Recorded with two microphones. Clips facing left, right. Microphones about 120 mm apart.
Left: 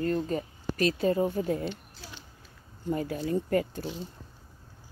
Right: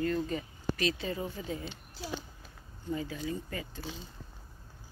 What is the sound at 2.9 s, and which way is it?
Speech, 55° left (ahead or behind).